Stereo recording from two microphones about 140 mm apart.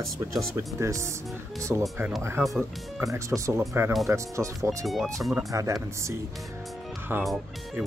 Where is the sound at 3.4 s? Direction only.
15° right (ahead or behind).